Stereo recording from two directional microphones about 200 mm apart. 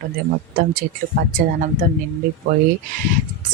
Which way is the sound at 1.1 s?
50° right (ahead or behind).